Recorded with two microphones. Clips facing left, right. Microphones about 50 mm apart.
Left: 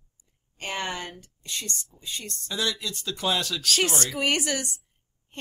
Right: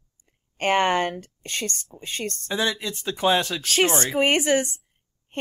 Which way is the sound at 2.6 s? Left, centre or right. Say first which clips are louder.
Right 3 dB; right.